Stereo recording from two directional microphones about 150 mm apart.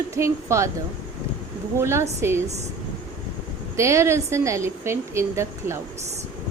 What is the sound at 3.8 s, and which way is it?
Speech, 20° right (ahead or behind).